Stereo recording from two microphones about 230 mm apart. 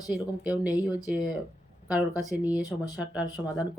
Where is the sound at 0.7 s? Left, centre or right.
Centre.